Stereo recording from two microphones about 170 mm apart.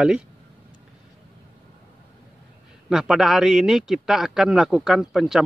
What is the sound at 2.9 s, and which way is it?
A man's voice, 5° right (ahead or behind).